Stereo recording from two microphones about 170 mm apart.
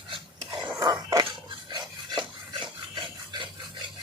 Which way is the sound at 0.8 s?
20° right (ahead or behind).